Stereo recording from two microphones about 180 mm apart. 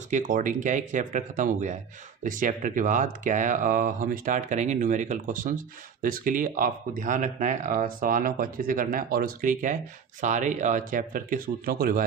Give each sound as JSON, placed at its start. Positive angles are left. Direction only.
{"t": 0.1, "sound": "speech", "side_deg": -45}